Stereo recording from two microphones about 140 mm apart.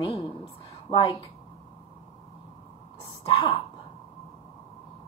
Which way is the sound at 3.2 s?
40° left (ahead or behind).